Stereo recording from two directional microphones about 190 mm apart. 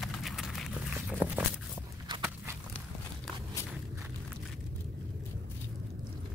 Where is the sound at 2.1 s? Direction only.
25° right (ahead or behind).